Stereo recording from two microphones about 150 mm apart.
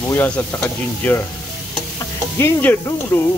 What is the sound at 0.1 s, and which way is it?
Speech, 15° left (ahead or behind).